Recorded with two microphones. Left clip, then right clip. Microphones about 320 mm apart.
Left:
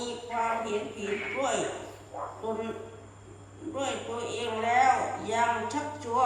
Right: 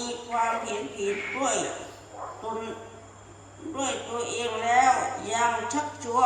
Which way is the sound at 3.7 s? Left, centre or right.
Right.